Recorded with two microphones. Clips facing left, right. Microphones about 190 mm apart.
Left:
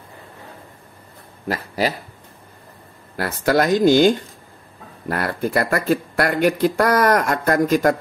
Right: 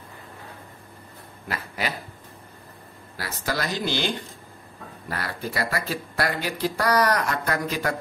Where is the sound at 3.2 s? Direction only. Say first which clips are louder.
Left 11 dB; 55° left (ahead or behind).